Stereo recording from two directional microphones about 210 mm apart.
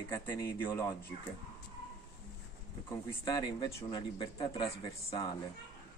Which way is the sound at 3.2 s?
20° left (ahead or behind).